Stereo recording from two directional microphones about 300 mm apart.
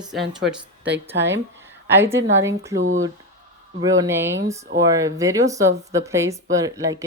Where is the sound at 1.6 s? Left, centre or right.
Centre.